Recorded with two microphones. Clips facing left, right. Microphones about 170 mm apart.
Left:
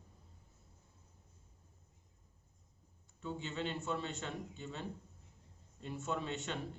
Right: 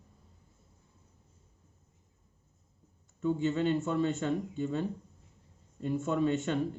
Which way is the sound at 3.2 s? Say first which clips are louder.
Right 12 dB; 50° right (ahead or behind).